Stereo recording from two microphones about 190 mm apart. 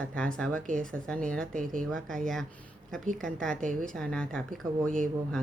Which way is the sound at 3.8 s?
5° left (ahead or behind).